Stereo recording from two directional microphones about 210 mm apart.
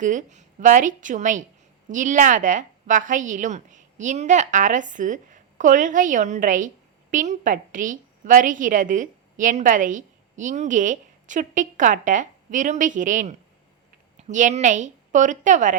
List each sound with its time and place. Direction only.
0.0 s a woman's voice: 35° right (ahead or behind)